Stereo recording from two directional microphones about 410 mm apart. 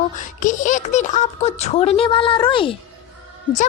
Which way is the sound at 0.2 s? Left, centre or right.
Centre.